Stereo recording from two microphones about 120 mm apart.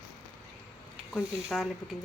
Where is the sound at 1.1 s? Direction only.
Centre (ahead or behind).